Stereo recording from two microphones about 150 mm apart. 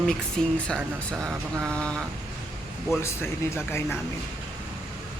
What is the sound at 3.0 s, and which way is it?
Speech, 15° left (ahead or behind).